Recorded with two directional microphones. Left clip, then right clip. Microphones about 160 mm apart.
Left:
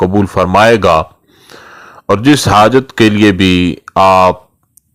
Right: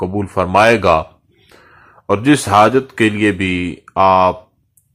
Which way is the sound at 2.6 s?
35° left (ahead or behind).